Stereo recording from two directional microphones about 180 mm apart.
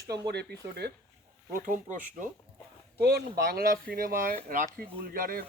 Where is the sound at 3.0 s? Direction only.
60° right (ahead or behind).